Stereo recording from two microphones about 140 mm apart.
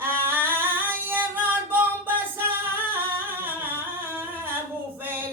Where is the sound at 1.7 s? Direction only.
15° right (ahead or behind).